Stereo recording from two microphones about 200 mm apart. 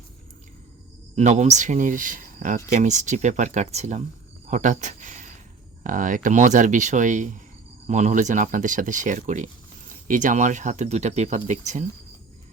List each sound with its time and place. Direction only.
1.1 s speech: 35° right (ahead or behind)